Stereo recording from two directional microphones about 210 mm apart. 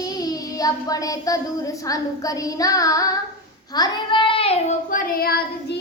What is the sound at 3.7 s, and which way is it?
Child singing, 20° left (ahead or behind).